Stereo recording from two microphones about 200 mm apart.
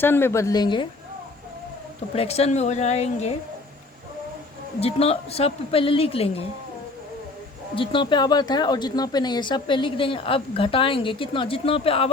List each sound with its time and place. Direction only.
0.0 s speech: 10° left (ahead or behind)
2.1 s a woman's voice: 30° left (ahead or behind)
4.8 s speech: 30° left (ahead or behind)
7.8 s speech: 25° left (ahead or behind)